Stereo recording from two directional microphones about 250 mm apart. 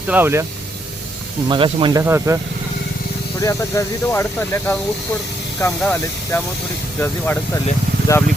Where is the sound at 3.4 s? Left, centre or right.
Centre.